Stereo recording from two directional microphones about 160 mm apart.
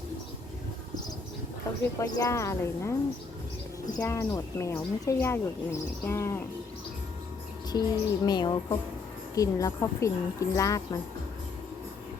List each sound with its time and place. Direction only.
1.8 s speech: 20° left (ahead or behind)
3.9 s speech: 20° left (ahead or behind)
7.7 s speech: 25° left (ahead or behind)